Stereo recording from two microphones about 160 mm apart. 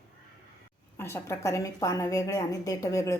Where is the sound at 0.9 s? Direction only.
15° left (ahead or behind).